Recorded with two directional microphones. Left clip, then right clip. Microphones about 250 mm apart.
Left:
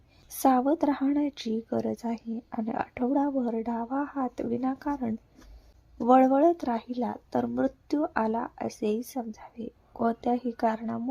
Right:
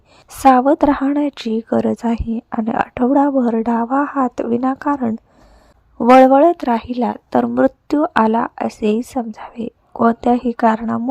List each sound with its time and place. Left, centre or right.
0.3 s a woman's voice: right